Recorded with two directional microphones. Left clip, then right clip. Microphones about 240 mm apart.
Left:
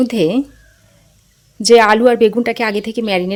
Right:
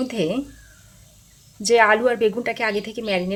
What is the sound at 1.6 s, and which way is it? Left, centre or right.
A woman's voice, left.